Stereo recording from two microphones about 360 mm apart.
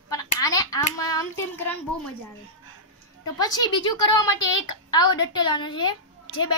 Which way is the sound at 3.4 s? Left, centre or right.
Centre.